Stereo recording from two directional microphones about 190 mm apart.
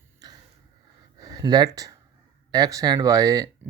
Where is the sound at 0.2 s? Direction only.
20° right (ahead or behind).